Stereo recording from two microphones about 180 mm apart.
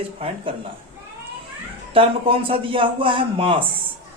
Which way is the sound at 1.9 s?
30° right (ahead or behind).